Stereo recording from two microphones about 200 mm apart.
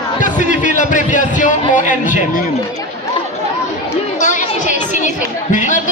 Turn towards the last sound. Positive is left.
turn(degrees=40)  # may be behind; listen again after turning